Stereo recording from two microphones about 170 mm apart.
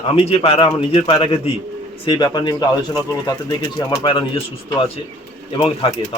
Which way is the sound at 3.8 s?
30° left (ahead or behind).